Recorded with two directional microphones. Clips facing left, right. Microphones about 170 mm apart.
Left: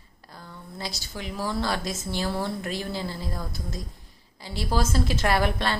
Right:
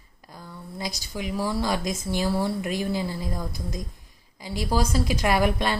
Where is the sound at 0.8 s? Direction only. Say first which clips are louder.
Right 4 dB; 15° right (ahead or behind).